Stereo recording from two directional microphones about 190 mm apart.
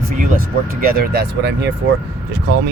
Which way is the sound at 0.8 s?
55° right (ahead or behind).